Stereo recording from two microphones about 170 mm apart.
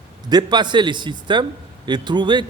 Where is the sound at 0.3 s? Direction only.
25° right (ahead or behind).